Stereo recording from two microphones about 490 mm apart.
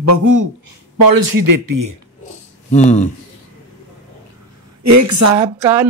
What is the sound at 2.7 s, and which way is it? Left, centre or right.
Speech, centre.